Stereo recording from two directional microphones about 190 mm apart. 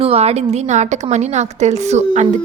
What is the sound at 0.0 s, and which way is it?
A woman's voice, 30° right (ahead or behind).